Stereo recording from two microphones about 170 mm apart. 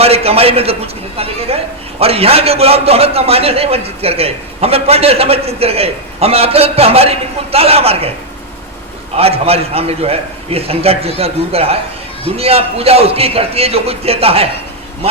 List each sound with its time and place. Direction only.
0.0 s a man's voice: 35° right (ahead or behind)
9.1 s a man's voice: 35° right (ahead or behind)